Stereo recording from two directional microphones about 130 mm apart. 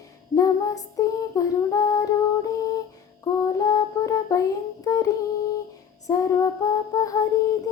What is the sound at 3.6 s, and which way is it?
Child singing, 25° left (ahead or behind).